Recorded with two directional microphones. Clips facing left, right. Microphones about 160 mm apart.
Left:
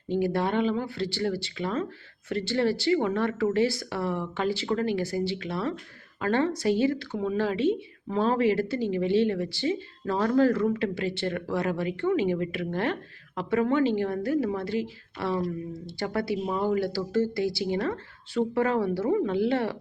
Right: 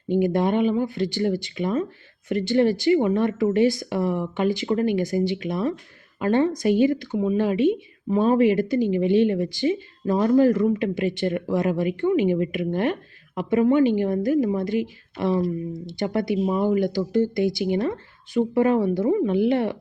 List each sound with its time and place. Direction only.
0.1 s speech: 20° right (ahead or behind)